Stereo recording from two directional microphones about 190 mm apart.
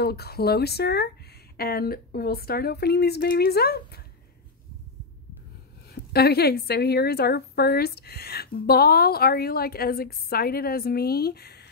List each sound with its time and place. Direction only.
0.0 s a woman's voice: 55° left (ahead or behind)
5.9 s a woman's voice: 55° left (ahead or behind)